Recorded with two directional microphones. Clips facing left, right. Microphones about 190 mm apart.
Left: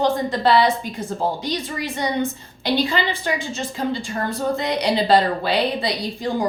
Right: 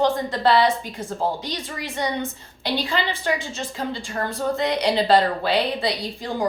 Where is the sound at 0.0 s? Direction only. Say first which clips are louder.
Left 1 dB; 15° left (ahead or behind).